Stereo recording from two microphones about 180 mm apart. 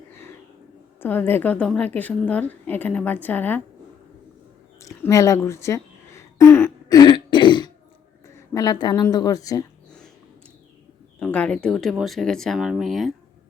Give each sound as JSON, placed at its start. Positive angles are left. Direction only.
{"t": 0.9, "sound": "a woman's voice", "side_deg": 10}
{"t": 4.8, "sound": "a sound", "side_deg": 15}
{"t": 8.4, "sound": "a woman's voice", "side_deg": 20}
{"t": 11.2, "sound": "speech", "side_deg": 5}